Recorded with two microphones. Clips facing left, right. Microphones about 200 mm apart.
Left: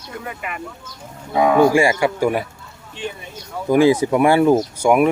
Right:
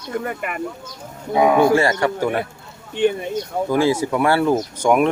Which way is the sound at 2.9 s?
60° right (ahead or behind).